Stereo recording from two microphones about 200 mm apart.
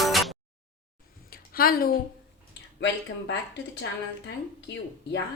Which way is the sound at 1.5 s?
45° left (ahead or behind).